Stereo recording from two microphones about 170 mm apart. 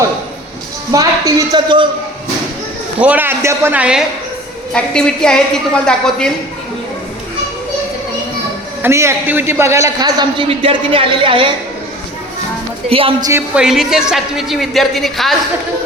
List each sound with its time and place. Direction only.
0.9 s a man's voice: 20° right (ahead or behind)
3.0 s a man's voice: 10° right (ahead or behind)
4.7 s speech: 5° left (ahead or behind)
8.8 s a man's voice: 15° right (ahead or behind); by 11.5 s 30° right (ahead or behind)
12.9 s a woman's voice: 30° right (ahead or behind)
13.3 s speech: 5° right (ahead or behind)